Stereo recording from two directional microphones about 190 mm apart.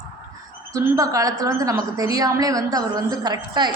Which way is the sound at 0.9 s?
20° right (ahead or behind).